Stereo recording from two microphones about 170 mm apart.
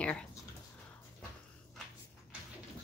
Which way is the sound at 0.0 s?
5° left (ahead or behind).